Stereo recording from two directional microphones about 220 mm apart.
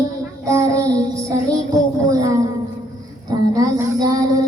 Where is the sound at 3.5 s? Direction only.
15° right (ahead or behind).